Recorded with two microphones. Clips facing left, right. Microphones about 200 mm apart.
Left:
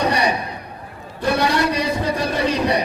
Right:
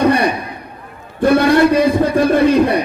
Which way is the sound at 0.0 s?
55° right (ahead or behind).